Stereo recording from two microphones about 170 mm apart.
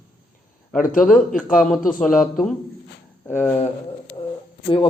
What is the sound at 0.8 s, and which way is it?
Speech, 55° left (ahead or behind).